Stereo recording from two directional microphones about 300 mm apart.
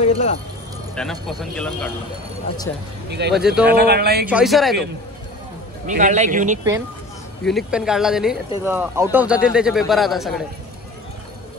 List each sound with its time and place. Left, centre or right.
0.0 s speech: left
0.9 s speech: centre
3.1 s speech: right
3.3 s speech: centre
3.6 s speech: right
4.3 s speech: centre
5.9 s a man's voice: right
7.4 s speech: centre